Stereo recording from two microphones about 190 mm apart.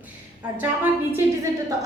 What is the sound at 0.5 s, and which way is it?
Speech, 10° right (ahead or behind).